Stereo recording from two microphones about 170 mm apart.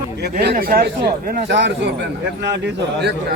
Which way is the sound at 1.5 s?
90° right.